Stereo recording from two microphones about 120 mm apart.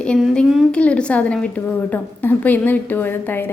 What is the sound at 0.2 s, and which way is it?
A woman's voice, 5° left (ahead or behind).